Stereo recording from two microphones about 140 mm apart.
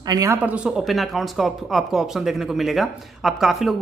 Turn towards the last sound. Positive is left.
turn(degrees=0)  # may be behind; listen again after turning